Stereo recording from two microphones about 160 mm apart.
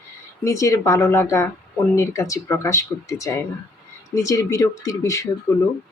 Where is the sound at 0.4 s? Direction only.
20° left (ahead or behind).